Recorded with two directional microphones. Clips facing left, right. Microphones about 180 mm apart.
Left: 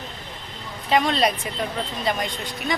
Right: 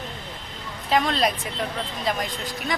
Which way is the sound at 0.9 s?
Centre (ahead or behind).